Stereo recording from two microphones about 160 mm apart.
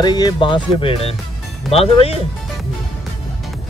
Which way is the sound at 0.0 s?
25° left (ahead or behind).